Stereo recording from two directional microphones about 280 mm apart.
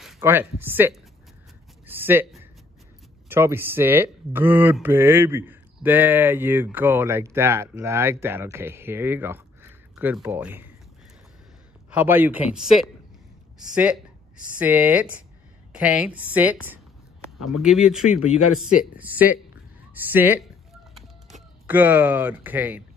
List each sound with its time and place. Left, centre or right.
0.0 s speech: centre
1.9 s a sound: centre
3.3 s speech: centre
11.9 s speech: centre
14.6 s speech: centre
18.2 s speech: left
18.9 s a woman's voice: centre
21.6 s speech: centre